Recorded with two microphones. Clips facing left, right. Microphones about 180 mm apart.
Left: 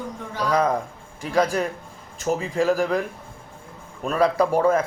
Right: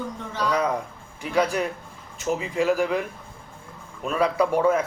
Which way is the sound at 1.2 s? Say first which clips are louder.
Left 2 dB; 40° left (ahead or behind).